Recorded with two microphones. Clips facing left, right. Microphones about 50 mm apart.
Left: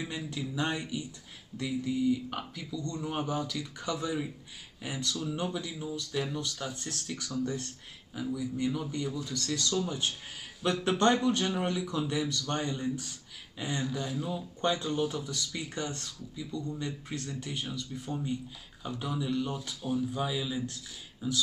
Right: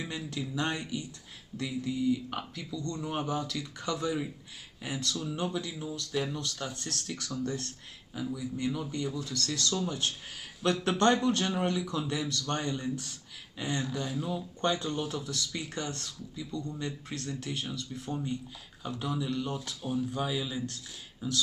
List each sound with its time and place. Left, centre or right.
0.0 s speech: centre
3.0 s speech: centre
6.3 s speech: centre
8.1 s speech: centre
9.2 s speech: centre
14.0 s speech: centre
19.8 s speech: centre